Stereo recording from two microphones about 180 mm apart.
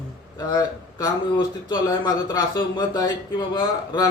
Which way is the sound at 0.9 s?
20° left (ahead or behind).